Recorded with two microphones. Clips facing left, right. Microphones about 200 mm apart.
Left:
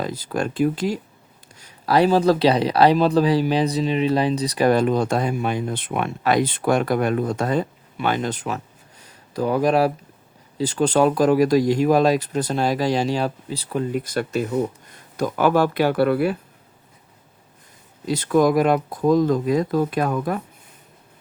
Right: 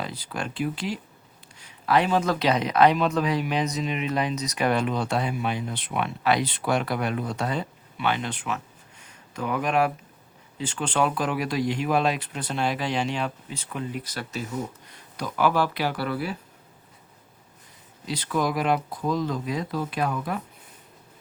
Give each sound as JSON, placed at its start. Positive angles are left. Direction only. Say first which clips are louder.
{"t": 0.0, "sound": "speech", "louder": "left 8 dB", "side_deg": 45}
{"t": 18.0, "sound": "speech", "louder": "left 9 dB", "side_deg": 45}